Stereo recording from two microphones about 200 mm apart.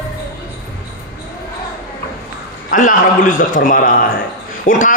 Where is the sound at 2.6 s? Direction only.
40° left (ahead or behind).